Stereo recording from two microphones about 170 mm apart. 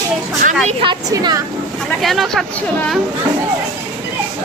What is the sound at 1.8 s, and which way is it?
Speech, centre (ahead or behind).